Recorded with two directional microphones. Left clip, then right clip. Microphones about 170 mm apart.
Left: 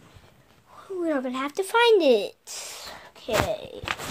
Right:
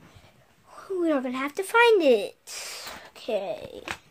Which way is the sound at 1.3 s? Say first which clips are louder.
Left 1 dB; 5° left (ahead or behind).